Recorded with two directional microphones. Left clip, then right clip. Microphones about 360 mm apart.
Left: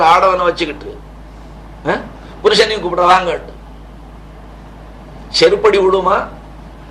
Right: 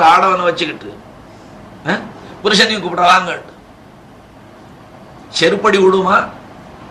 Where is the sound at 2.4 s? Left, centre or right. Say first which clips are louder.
Left 1 dB; centre.